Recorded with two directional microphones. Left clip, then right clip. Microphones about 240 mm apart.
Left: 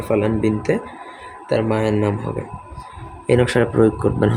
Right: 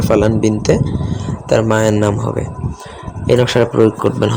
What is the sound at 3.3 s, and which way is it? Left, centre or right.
Speech, centre.